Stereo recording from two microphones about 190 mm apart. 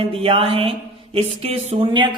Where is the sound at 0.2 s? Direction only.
30° right (ahead or behind).